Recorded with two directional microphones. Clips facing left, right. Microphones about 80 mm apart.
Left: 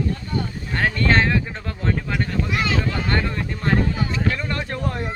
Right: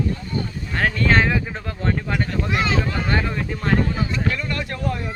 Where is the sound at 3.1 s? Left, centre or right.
Centre.